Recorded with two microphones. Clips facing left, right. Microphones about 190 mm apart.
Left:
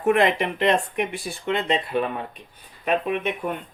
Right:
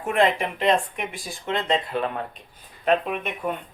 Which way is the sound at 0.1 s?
70° left (ahead or behind).